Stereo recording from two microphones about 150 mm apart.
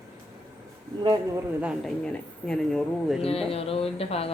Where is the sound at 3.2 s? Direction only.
40° left (ahead or behind).